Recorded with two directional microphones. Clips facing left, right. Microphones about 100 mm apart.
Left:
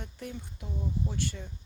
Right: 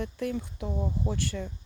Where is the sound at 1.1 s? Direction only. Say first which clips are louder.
Right 3 dB; 80° right.